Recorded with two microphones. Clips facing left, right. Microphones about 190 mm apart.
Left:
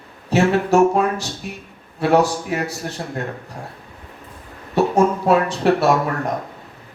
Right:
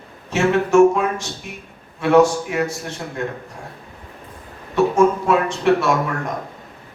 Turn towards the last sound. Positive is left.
turn(degrees=35)  # may be behind; listen again after turning